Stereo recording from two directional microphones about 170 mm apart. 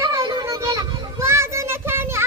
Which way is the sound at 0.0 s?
25° right (ahead or behind).